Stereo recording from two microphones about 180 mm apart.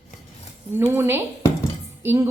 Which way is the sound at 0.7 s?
10° right (ahead or behind).